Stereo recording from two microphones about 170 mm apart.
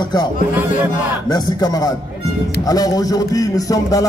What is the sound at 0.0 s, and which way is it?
Speech, 25° left (ahead or behind).